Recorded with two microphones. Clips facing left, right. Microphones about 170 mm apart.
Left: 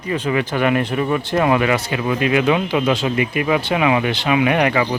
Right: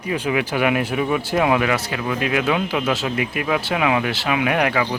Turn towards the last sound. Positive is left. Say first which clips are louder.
# left 3 dB
turn(degrees=0)  # may be behind; listen again after turning